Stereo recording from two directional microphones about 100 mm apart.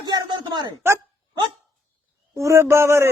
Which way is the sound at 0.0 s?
45° right (ahead or behind).